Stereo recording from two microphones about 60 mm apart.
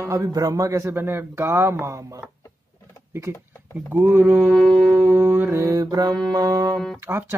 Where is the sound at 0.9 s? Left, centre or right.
Right.